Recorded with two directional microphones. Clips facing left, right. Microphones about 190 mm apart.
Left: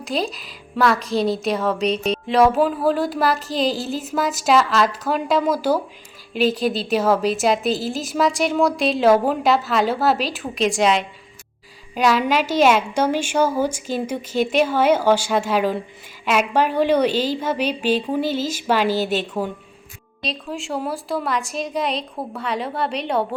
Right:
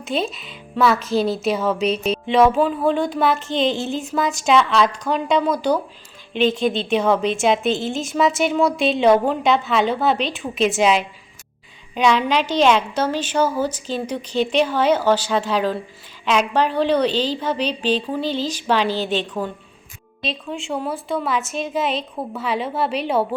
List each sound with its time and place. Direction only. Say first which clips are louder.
0.0 s a woman's voice: right 1 dB; centre (ahead or behind)